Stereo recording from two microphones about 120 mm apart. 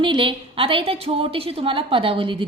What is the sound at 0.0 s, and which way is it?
A woman's voice, 45° right (ahead or behind).